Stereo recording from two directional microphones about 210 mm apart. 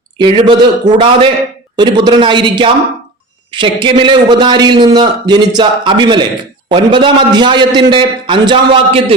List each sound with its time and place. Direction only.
0.2 s a man's voice: 20° right (ahead or behind)